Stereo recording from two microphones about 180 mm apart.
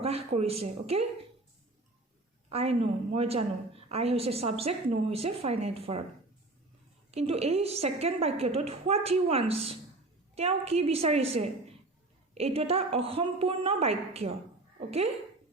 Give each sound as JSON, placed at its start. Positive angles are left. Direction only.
{"t": 0.0, "sound": "a woman's voice", "side_deg": -35}
{"t": 2.5, "sound": "a woman's voice", "side_deg": -35}
{"t": 7.1, "sound": "a woman's voice", "side_deg": -35}